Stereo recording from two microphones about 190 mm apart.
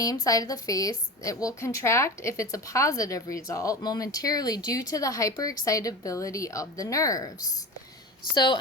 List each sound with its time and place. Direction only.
0.0 s a woman's voice: 15° left (ahead or behind)